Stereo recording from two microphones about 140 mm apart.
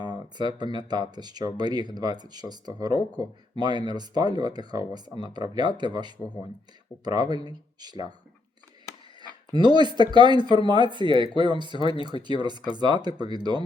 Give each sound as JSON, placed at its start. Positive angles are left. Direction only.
{"t": 0.3, "sound": "speech", "side_deg": -30}
{"t": 9.5, "sound": "speech", "side_deg": -30}
{"t": 11.8, "sound": "speech", "side_deg": 40}
{"t": 12.2, "sound": "speech", "side_deg": -30}